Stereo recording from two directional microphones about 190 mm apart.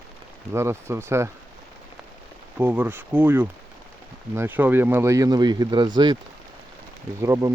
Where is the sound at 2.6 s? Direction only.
10° right (ahead or behind).